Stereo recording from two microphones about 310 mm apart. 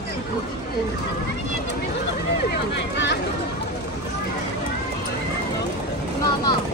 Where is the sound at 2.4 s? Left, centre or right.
Left.